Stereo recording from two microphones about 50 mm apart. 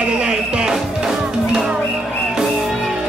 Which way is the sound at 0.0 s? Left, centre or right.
Right.